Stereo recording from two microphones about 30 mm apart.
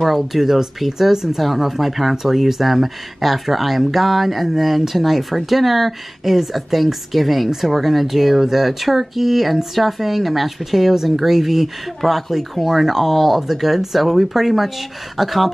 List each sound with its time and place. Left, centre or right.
0.0 s speech: centre